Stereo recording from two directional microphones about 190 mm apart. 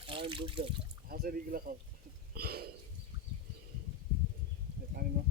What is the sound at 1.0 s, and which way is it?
Speech, 50° right (ahead or behind).